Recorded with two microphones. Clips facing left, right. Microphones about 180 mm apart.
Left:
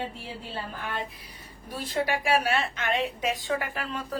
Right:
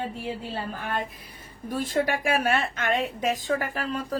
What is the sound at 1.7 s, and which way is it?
A woman's voice, 45° right (ahead or behind).